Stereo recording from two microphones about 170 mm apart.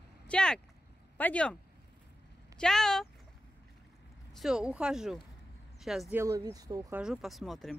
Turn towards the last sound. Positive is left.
turn(degrees=0)  # may be behind; listen again after turning